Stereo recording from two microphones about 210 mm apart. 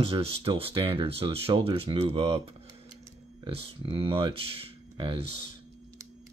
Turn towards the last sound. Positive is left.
turn(degrees=-25)  # may be behind; listen again after turning